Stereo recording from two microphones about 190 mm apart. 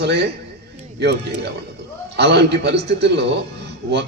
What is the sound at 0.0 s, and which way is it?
A man's voice, 60° right (ahead or behind).